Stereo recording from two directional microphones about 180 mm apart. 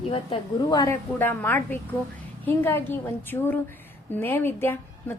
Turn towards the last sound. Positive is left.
turn(degrees=15)  # may be behind; listen again after turning